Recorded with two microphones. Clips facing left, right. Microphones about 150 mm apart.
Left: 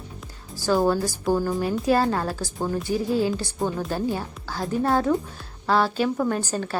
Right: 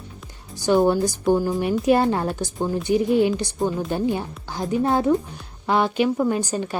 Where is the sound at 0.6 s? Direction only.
20° right (ahead or behind).